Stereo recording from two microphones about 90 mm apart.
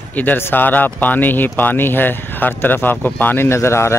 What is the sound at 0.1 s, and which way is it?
Speech, 20° left (ahead or behind).